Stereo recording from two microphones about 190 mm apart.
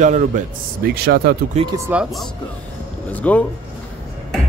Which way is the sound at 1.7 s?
15° right (ahead or behind).